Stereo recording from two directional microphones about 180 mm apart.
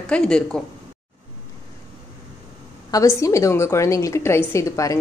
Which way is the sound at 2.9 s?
15° left (ahead or behind).